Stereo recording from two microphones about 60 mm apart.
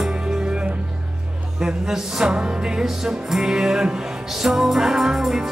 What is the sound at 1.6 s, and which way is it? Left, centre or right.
Music, centre.